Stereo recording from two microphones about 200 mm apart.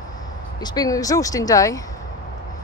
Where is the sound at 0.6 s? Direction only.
20° left (ahead or behind).